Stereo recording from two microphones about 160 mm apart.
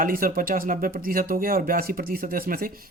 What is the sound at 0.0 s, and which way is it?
Speech, 60° right (ahead or behind).